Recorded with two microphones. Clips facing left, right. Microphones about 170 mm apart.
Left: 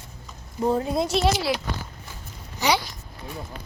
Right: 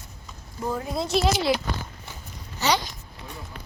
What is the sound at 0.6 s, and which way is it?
Speech, 25° left (ahead or behind).